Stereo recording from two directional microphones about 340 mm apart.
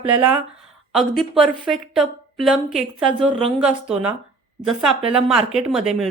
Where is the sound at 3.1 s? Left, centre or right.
Centre.